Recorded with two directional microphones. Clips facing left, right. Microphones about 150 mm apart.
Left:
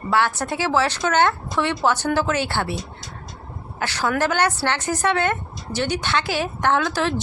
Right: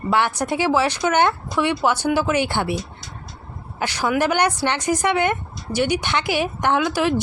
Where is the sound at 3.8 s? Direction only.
15° right (ahead or behind).